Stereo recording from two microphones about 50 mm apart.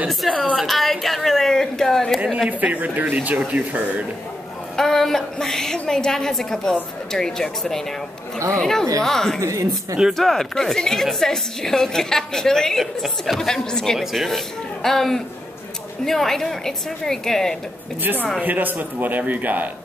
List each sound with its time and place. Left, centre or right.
0.3 s a woman's voice: centre
0.6 s a sound: centre
2.6 s a man's voice: right
4.7 s a woman's voice: centre
9.4 s a woman's voice: right
10.1 s a woman's voice: centre
13.9 s a woman's voice: centre
18.4 s a man's voice: right